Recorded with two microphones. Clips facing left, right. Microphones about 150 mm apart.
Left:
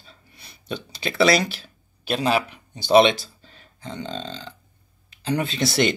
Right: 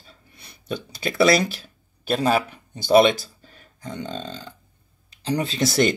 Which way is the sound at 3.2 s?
50° right (ahead or behind).